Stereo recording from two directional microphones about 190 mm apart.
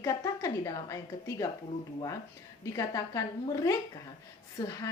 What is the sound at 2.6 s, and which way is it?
A woman's voice, 15° left (ahead or behind).